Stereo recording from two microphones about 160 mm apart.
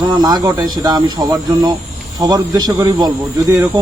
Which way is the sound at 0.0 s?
25° right (ahead or behind).